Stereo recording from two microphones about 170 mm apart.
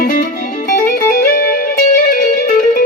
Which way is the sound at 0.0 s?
50° left (ahead or behind).